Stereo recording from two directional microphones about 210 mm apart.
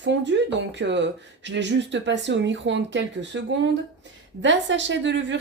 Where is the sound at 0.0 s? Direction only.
60° right (ahead or behind).